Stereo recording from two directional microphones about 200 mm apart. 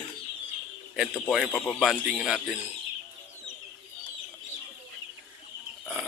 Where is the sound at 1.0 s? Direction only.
Centre (ahead or behind).